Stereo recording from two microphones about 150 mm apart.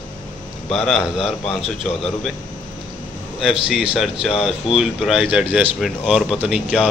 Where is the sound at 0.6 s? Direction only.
Centre (ahead or behind).